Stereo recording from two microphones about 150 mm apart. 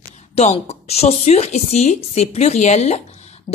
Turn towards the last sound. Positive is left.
turn(degrees=45)  # may be behind; listen again after turning